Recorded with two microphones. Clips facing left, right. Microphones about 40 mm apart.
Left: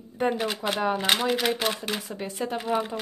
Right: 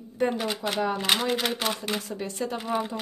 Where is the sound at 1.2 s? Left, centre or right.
Centre.